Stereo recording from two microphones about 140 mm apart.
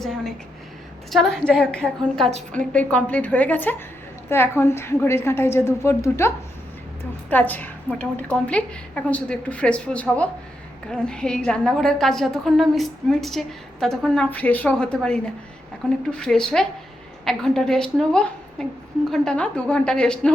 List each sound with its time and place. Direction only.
1.1 s a woman's voice: 5° left (ahead or behind)
2.2 s a woman's voice: 50° right (ahead or behind)
2.6 s a woman's voice: 10° left (ahead or behind)